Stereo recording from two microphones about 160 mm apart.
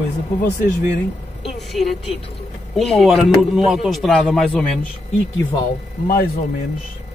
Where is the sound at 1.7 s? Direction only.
Centre (ahead or behind).